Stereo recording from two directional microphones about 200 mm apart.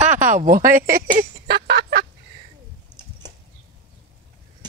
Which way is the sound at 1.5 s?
55° right (ahead or behind).